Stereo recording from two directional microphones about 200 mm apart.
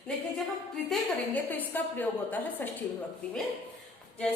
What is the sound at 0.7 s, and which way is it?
A woman's voice, 5° left (ahead or behind).